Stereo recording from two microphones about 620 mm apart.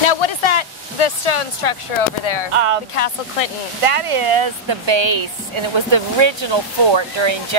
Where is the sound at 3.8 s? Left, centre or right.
Right.